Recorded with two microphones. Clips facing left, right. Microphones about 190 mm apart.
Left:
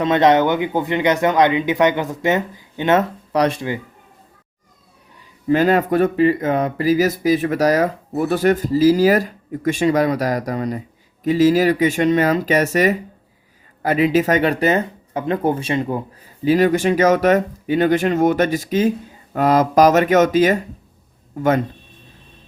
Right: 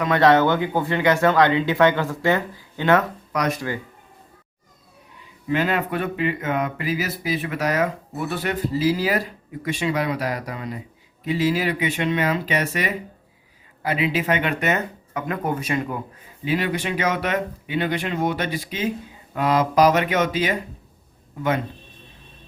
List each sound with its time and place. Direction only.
0.0 s speech: 20° left (ahead or behind)
5.5 s speech: 40° left (ahead or behind)
16.4 s speech: 40° left (ahead or behind)